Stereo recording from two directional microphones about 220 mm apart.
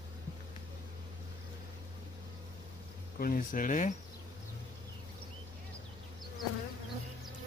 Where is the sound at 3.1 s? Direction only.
40° left (ahead or behind).